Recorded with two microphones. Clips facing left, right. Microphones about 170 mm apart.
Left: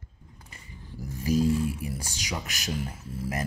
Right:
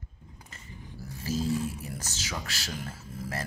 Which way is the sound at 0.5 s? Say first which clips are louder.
Left 1 dB; 10° left (ahead or behind).